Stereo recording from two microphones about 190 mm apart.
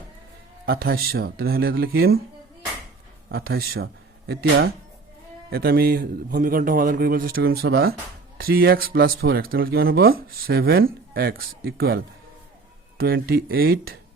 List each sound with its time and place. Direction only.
0.6 s speech: 55° right (ahead or behind)
3.2 s speech: 55° right (ahead or behind)